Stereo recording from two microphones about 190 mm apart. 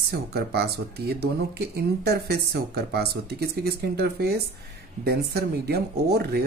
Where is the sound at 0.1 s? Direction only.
55° right (ahead or behind).